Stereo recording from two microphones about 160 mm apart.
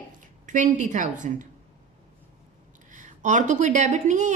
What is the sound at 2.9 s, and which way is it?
A woman's voice, 50° right (ahead or behind).